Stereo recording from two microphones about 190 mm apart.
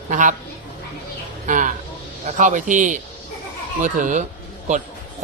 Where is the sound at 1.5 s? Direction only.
40° right (ahead or behind).